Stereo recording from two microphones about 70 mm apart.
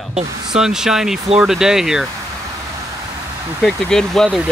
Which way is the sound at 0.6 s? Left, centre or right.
Centre.